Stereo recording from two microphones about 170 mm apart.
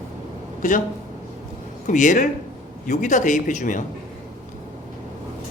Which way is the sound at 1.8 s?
45° left (ahead or behind).